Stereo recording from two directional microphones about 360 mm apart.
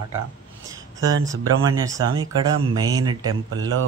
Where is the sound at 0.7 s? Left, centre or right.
Centre.